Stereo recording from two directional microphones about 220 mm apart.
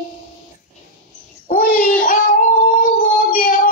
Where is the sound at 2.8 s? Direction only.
40° left (ahead or behind).